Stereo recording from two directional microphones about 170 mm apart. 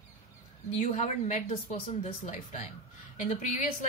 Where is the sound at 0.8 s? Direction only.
45° left (ahead or behind).